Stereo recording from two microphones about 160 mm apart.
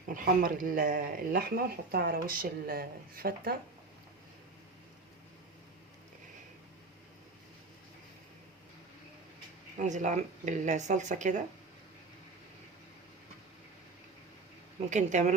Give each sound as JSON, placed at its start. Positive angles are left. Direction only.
{"t": 0.1, "sound": "speech", "side_deg": -60}
{"t": 9.7, "sound": "speech", "side_deg": -50}
{"t": 14.8, "sound": "speech", "side_deg": -50}